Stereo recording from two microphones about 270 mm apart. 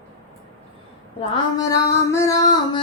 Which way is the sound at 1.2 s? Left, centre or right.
Centre.